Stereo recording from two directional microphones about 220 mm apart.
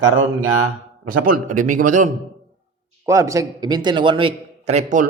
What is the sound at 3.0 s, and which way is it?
Speech, 15° right (ahead or behind).